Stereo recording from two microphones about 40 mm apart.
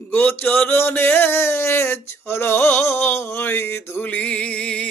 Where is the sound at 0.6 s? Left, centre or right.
Left.